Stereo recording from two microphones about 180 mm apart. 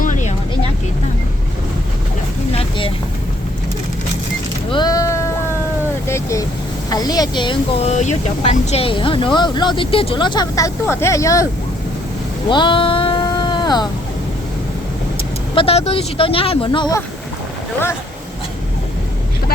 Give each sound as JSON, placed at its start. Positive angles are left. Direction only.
{"t": 0.0, "sound": "vehicle", "side_deg": 45}
{"t": 2.5, "sound": "vehicle", "side_deg": 30}
{"t": 4.7, "sound": "a sound", "side_deg": 20}
{"t": 6.1, "sound": "vehicle", "side_deg": 15}
{"t": 6.9, "sound": "speech", "side_deg": 20}
{"t": 12.5, "sound": "a sound", "side_deg": 25}
{"t": 15.5, "sound": "speech", "side_deg": 35}